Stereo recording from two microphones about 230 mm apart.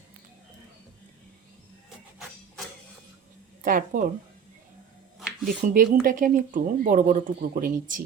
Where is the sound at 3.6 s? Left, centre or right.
Right.